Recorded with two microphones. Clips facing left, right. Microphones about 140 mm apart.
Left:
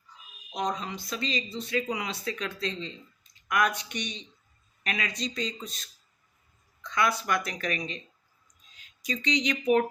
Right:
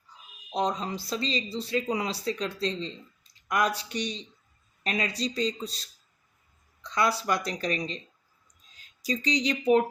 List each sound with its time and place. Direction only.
0.5 s speech: 30° right (ahead or behind)